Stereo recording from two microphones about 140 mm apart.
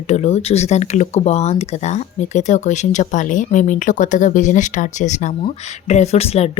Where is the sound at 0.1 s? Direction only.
50° left (ahead or behind).